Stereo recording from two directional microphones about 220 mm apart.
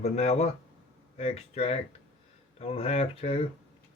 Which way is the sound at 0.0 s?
30° left (ahead or behind).